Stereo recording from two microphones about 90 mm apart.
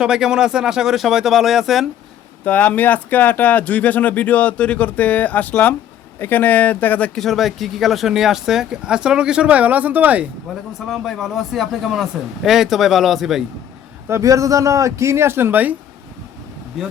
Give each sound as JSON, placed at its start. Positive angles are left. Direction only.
{"t": 0.0, "sound": "a man's voice", "side_deg": -5}
{"t": 2.4, "sound": "speech", "side_deg": 15}
{"t": 7.2, "sound": "speech", "side_deg": 0}
{"t": 10.8, "sound": "a man's voice", "side_deg": 0}
{"t": 14.1, "sound": "speech", "side_deg": -35}